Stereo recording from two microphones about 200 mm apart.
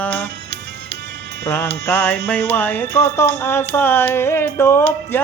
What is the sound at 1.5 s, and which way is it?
Music, 10° left (ahead or behind).